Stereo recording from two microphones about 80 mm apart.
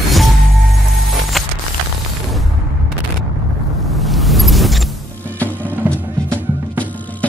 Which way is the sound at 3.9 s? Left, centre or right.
Centre.